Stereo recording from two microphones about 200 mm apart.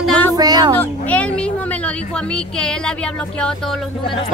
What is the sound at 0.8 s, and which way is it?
Speech, 5° left (ahead or behind).